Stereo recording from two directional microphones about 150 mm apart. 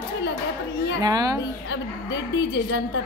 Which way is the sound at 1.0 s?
25° right (ahead or behind).